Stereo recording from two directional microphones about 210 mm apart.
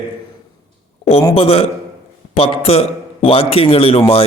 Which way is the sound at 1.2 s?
25° left (ahead or behind).